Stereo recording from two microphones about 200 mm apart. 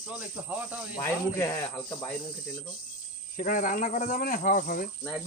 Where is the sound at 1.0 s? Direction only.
15° left (ahead or behind).